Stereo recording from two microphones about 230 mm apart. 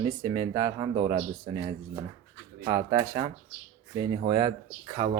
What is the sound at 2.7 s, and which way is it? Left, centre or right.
Speech, centre.